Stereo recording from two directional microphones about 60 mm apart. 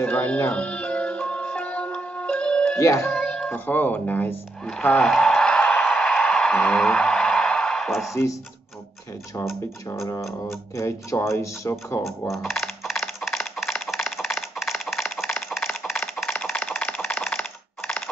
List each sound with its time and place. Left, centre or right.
0.1 s speech: left
0.5 s music: centre
2.8 s speech: left
3.1 s music: centre
3.4 s speech: left
4.9 s speech: centre
5.4 s a sound: centre
8.1 s speech: left
9.8 s speech: left
12.3 s coin: centre
16.5 s a sound: centre
17.1 s typing: centre